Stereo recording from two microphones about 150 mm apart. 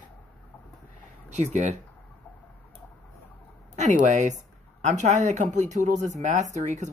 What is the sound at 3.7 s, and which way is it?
Speech, 50° right (ahead or behind).